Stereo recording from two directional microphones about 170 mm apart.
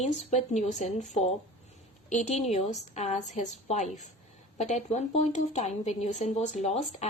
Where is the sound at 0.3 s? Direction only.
40° left (ahead or behind).